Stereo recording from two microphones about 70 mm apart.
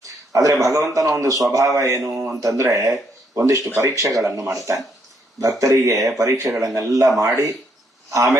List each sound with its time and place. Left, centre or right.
0.0 s a sound: right
0.9 s a man's voice: right
6.3 s speech: right
6.7 s a man's voice: right